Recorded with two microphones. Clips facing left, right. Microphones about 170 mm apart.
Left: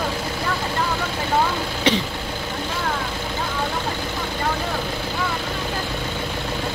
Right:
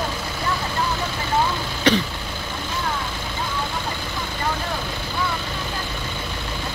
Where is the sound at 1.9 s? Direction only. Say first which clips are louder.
Right 2 dB; 25° left (ahead or behind).